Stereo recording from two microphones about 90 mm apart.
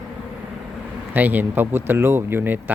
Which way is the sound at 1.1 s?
20° right (ahead or behind).